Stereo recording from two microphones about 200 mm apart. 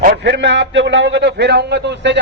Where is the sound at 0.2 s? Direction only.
60° right (ahead or behind).